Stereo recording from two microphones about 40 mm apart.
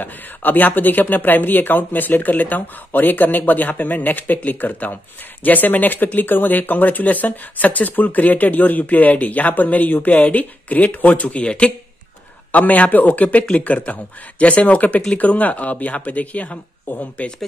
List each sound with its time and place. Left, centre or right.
0.0 s speech: left
12.5 s speech: left